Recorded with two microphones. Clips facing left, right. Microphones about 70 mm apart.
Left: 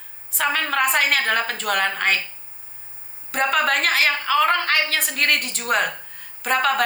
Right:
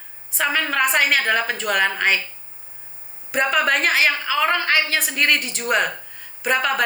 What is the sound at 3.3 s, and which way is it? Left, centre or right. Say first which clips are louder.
A woman's voice: right 1 dB; centre.